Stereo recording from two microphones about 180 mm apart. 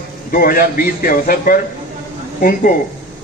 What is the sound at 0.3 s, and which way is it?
A man's voice, 55° left (ahead or behind).